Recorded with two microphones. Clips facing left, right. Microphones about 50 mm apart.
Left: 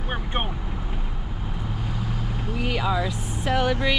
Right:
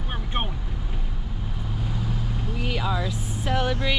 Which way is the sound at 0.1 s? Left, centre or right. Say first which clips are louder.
Left 2 dB; centre.